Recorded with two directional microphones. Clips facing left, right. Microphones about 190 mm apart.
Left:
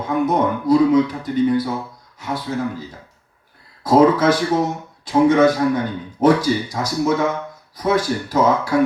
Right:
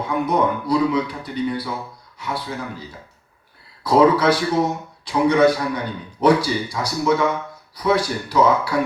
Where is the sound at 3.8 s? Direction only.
45° left (ahead or behind).